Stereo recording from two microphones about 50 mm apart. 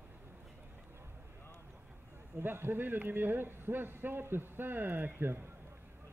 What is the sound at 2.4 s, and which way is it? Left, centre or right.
Speech, right.